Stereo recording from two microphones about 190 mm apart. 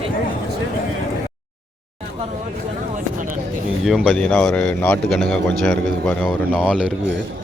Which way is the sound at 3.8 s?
Centre (ahead or behind).